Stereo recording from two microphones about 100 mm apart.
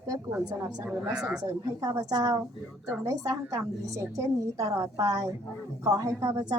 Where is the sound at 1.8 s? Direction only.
40° right (ahead or behind).